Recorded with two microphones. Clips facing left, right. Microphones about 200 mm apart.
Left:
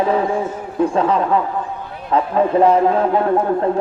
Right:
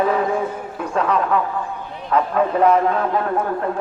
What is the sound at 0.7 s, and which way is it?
A man's voice, 30° left (ahead or behind).